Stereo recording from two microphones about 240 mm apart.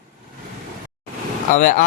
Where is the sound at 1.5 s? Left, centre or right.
Left.